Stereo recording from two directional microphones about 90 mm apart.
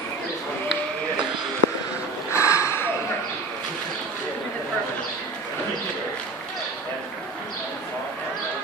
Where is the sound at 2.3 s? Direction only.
35° left (ahead or behind).